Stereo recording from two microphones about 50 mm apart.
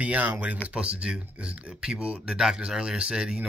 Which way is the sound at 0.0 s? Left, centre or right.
Right.